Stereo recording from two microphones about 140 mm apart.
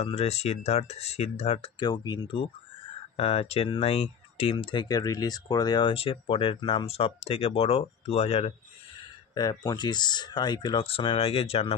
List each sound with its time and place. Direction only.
0.0 s speech: 50° left (ahead or behind)
1.8 s speech: 35° left (ahead or behind)
9.3 s speech: 25° left (ahead or behind); by 11.7 s 45° left (ahead or behind)